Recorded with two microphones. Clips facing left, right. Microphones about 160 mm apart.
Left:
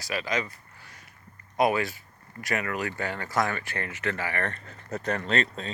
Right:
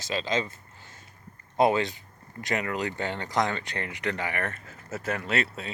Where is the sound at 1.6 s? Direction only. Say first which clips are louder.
Right 2 dB; 25° right (ahead or behind).